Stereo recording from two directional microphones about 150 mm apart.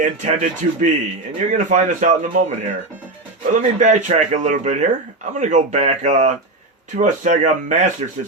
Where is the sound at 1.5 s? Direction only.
55° right (ahead or behind).